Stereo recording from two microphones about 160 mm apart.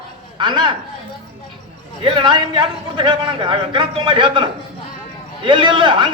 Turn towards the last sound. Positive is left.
turn(degrees=-30)  # may be behind; listen again after turning